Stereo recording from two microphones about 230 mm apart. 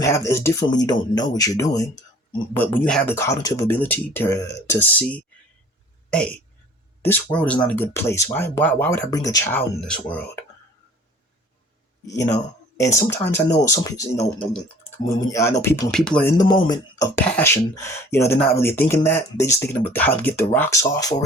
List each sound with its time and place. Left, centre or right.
0.0 s speech: centre
12.0 s speech: centre
15.3 s speech: centre
16.4 s speech: centre